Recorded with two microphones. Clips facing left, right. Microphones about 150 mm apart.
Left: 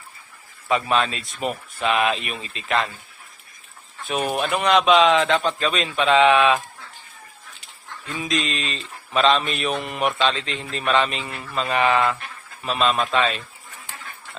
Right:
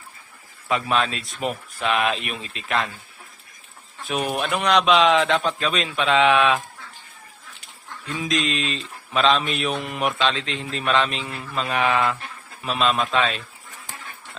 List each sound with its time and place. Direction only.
0.7 s speech: centre (ahead or behind)
4.0 s speech: centre (ahead or behind)
8.0 s speech: centre (ahead or behind)